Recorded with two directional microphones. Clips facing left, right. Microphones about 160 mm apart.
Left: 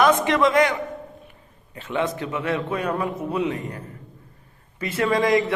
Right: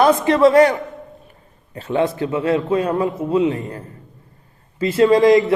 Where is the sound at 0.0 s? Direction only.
30° right (ahead or behind).